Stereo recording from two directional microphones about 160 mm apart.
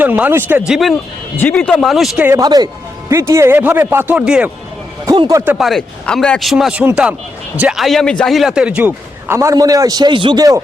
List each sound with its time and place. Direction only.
0.0 s speech: 10° right (ahead or behind)
1.4 s speech: 10° left (ahead or behind)
2.2 s speech: 20° right (ahead or behind)
5.0 s speech: 25° right (ahead or behind)
5.5 s speech: centre (ahead or behind); by 10.6 s 25° right (ahead or behind)